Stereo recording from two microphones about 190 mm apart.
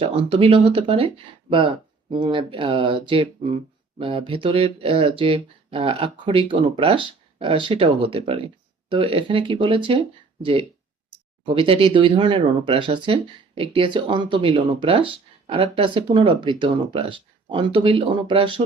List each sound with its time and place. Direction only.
0.0 s speech: 30° right (ahead or behind)